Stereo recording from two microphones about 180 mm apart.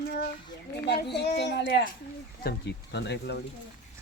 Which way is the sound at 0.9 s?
70° left (ahead or behind).